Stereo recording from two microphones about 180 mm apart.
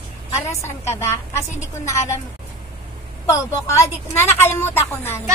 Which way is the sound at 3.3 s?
15° left (ahead or behind).